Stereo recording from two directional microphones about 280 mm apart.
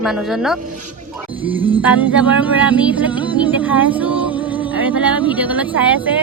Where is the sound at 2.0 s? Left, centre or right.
Centre.